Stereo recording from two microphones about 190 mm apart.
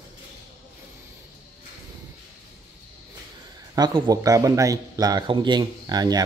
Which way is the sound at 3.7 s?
20° right (ahead or behind).